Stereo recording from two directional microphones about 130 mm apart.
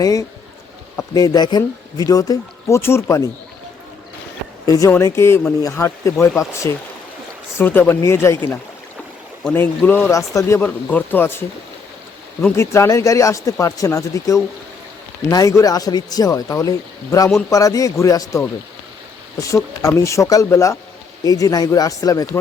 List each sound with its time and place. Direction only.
0.0 s speech: 25° left (ahead or behind)
4.6 s speech: 25° left (ahead or behind)
9.4 s speech: 15° left (ahead or behind)
10.1 s speech: 25° left (ahead or behind)
10.6 s speech: 15° left (ahead or behind)
12.5 s speech: 20° left (ahead or behind)